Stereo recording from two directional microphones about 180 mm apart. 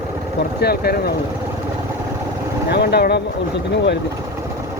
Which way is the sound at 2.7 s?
65° left (ahead or behind).